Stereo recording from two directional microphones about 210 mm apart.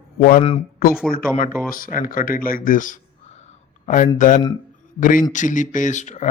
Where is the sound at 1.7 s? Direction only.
40° left (ahead or behind).